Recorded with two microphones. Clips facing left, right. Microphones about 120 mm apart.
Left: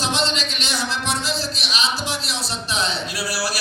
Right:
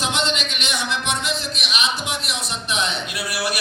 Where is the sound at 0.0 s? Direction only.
35° left (ahead or behind).